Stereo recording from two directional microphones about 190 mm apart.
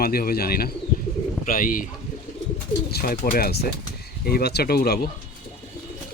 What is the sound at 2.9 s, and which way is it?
Speech, 50° left (ahead or behind).